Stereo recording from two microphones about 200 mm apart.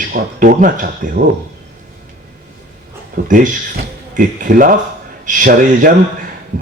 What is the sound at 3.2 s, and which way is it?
A man's voice, 40° right (ahead or behind).